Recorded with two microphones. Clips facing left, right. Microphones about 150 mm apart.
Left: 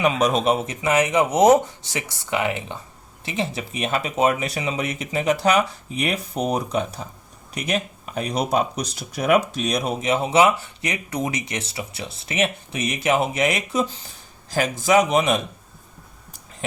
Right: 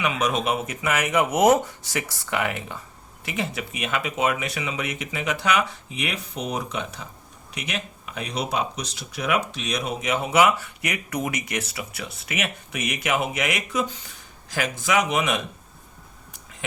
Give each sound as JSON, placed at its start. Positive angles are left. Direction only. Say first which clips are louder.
{"t": 0.0, "sound": "speech", "louder": "left 5 dB", "side_deg": 35}